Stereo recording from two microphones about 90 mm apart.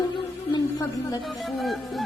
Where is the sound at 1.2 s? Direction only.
Centre (ahead or behind).